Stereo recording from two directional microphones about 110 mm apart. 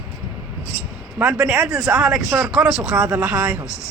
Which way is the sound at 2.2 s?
25° right (ahead or behind).